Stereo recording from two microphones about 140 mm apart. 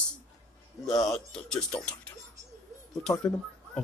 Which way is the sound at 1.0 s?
5° left (ahead or behind).